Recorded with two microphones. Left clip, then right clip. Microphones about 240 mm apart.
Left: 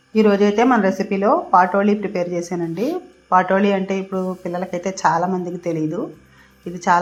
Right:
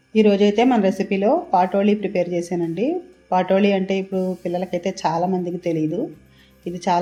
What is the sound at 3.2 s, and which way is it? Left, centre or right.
Speech, centre.